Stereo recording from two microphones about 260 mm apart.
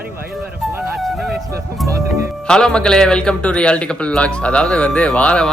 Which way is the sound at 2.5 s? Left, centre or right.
Centre.